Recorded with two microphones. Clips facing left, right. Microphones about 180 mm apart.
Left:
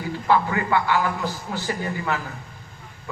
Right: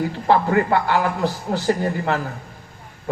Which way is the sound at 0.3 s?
45° right (ahead or behind).